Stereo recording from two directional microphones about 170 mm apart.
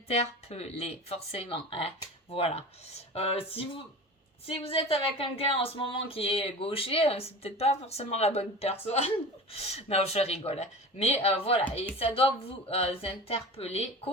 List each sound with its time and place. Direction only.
0.1 s speech: 35° left (ahead or behind)